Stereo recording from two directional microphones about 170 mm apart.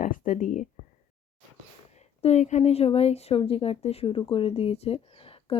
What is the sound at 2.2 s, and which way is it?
Speech, 40° left (ahead or behind).